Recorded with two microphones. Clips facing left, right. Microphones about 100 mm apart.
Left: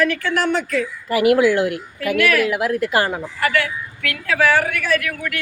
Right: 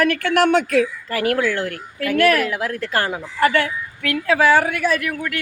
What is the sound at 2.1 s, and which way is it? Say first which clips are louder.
Speech: right 2 dB; 40° right (ahead or behind).